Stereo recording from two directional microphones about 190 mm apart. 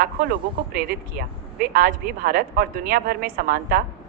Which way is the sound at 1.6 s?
50° right (ahead or behind).